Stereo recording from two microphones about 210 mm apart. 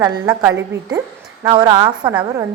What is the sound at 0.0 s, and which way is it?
A woman's voice, 15° right (ahead or behind).